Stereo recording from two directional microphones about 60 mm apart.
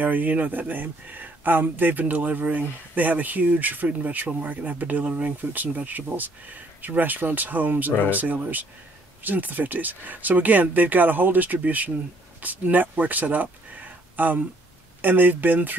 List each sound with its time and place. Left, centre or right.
0.0 s speech: right